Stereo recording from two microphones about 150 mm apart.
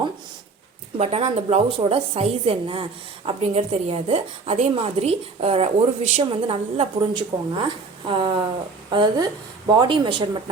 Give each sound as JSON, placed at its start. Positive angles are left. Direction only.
{"t": 0.9, "sound": "a woman's voice", "side_deg": -45}